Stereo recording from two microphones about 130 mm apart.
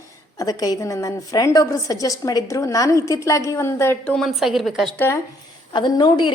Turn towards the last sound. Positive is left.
turn(degrees=35)  # may be behind; listen again after turning